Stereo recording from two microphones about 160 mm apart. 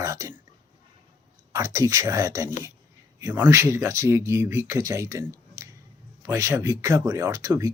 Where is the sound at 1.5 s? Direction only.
20° right (ahead or behind).